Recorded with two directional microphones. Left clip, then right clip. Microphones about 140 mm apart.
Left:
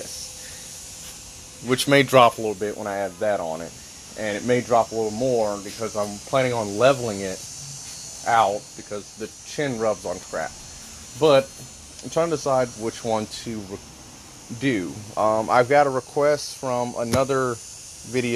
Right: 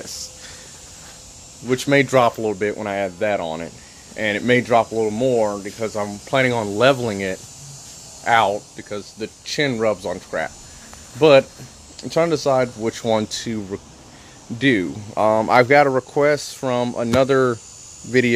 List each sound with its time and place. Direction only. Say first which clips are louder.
1.7 s speech: right 1 dB; 30° right (ahead or behind)
2.6 s speech: right 4 dB; 90° right
4.9 s speech: right 4 dB; 60° right (ahead or behind)
7.0 s speech: right 4 dB; 70° right (ahead or behind)
8.8 s speech: right 3 dB; 85° right
11.1 s speech: right 5 dB; 75° right (ahead or behind)
12.0 s speech: right 4 dB; 90° right
14.6 s speech: right 6 dB; 70° right (ahead or behind)